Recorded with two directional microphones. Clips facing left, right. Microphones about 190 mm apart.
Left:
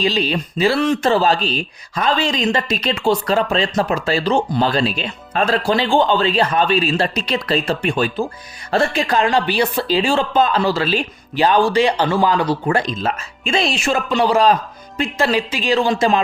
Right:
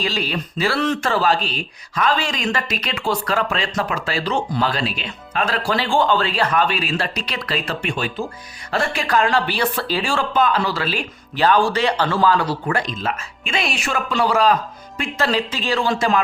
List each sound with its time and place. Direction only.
0.0 s speech: 20° left (ahead or behind)
1.1 s speech: 25° left (ahead or behind)
5.6 s speech: 20° left (ahead or behind)